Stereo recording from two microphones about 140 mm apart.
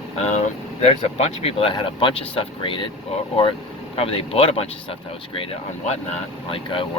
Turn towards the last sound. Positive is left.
turn(degrees=40)  # may be behind; listen again after turning